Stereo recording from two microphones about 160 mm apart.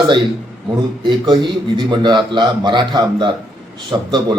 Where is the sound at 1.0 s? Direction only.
30° right (ahead or behind).